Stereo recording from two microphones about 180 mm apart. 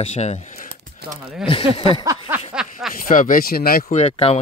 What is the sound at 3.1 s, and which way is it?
Speech, 45° left (ahead or behind).